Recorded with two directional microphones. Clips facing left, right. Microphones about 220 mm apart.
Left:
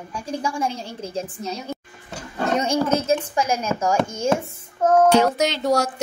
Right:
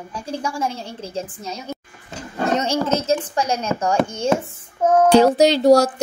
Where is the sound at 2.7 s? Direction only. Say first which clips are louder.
Even; 10° left (ahead or behind).